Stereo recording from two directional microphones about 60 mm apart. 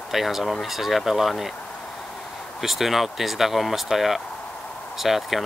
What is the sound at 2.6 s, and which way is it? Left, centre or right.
Speech, centre.